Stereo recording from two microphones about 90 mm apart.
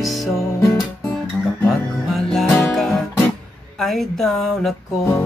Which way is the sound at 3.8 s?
5° left (ahead or behind).